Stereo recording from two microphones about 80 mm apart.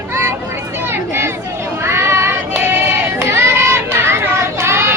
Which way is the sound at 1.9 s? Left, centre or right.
Right.